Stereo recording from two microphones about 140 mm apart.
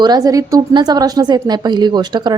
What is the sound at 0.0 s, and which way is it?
A woman's voice, 25° right (ahead or behind).